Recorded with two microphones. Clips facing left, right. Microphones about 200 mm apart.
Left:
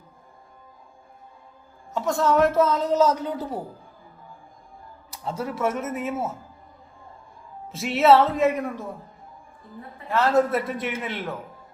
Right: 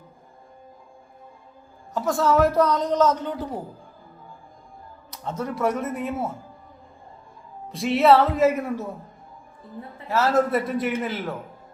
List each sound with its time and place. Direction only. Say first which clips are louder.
1.9 s a man's voice: right 1 dB; centre (ahead or behind)
5.1 s a man's voice: even; 10° left (ahead or behind)
7.7 s a man's voice: even; centre (ahead or behind)
10.1 s a man's voice: even; 5° right (ahead or behind)